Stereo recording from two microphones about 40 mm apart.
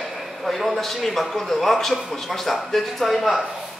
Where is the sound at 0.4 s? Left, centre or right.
Centre.